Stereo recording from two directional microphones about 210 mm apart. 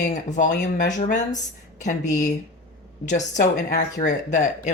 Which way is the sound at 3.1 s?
35° left (ahead or behind).